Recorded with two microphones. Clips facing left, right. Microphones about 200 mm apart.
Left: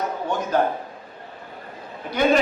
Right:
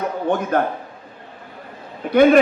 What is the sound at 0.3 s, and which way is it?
Speech, 60° right (ahead or behind).